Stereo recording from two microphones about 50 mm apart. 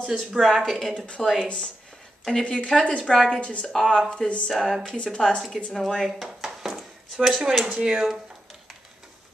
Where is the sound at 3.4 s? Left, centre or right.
Left; by 6.1 s centre.